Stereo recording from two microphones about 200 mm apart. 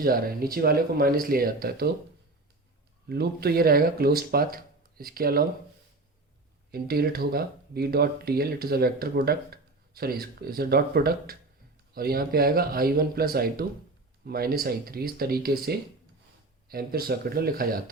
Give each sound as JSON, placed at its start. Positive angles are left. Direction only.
{"t": 0.0, "sound": "speech", "side_deg": -45}
{"t": 3.1, "sound": "speech", "side_deg": -50}
{"t": 6.7, "sound": "speech", "side_deg": -50}